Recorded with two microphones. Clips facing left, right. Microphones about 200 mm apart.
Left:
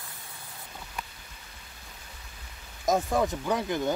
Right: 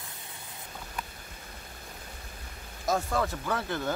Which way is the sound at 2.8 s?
20° left (ahead or behind).